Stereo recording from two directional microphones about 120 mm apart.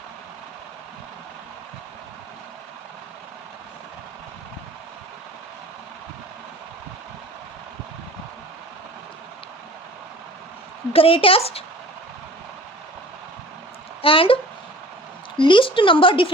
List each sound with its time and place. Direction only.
10.9 s speech: 50° left (ahead or behind)
14.0 s speech: 50° left (ahead or behind)
15.4 s speech: 40° left (ahead or behind)